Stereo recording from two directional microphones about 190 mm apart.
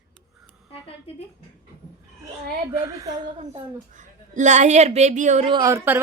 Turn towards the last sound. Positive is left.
turn(degrees=-15)  # may be behind; listen again after turning